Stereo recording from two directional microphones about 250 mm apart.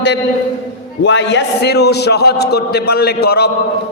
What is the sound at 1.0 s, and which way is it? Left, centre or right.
A man's voice, left.